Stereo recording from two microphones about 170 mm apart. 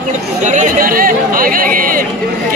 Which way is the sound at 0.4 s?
45° right (ahead or behind).